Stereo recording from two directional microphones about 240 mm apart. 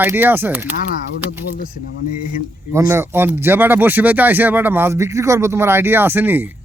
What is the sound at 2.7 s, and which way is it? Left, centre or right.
Speech, centre.